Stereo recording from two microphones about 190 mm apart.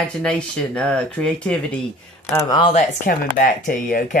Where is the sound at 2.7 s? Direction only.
45° left (ahead or behind).